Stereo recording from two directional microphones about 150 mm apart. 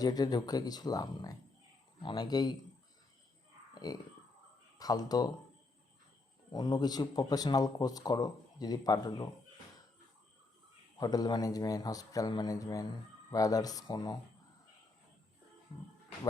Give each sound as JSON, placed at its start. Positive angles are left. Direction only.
{"t": 0.0, "sound": "a man's voice", "side_deg": 25}
{"t": 4.8, "sound": "a man's voice", "side_deg": 25}
{"t": 6.5, "sound": "a man's voice", "side_deg": 30}
{"t": 10.9, "sound": "a man's voice", "side_deg": 25}